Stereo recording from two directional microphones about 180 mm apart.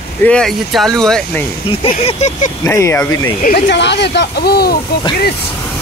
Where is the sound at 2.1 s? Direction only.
40° left (ahead or behind).